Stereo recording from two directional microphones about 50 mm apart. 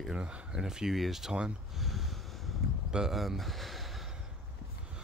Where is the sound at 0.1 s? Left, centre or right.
Centre.